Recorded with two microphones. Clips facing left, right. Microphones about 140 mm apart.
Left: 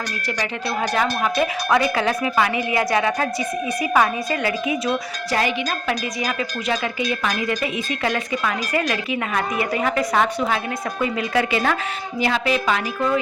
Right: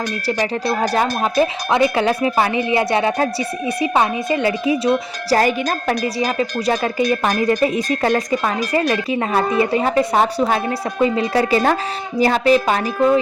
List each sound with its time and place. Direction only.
0.8 s speech: 35° right (ahead or behind)